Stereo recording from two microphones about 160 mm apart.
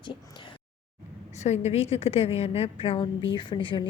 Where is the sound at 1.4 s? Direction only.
45° left (ahead or behind).